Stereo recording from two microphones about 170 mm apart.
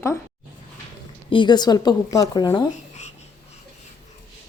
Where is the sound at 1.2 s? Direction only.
30° left (ahead or behind).